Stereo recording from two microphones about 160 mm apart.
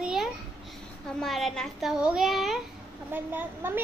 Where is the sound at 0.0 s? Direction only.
5° right (ahead or behind).